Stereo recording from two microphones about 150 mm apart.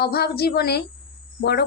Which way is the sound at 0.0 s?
90° left.